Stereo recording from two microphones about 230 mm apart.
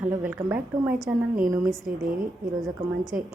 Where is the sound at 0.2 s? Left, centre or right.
Centre.